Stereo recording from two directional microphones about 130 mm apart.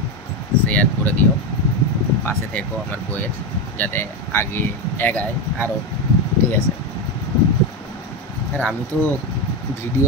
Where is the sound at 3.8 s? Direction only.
15° left (ahead or behind).